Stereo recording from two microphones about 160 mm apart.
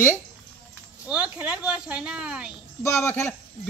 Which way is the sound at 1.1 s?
10° right (ahead or behind).